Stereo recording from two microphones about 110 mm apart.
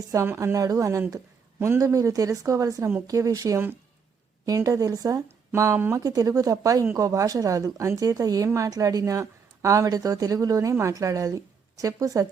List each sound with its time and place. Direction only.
0.1 s speech: 25° right (ahead or behind)